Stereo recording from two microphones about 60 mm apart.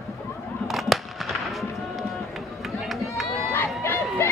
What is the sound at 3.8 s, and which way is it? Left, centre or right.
Crowd, left.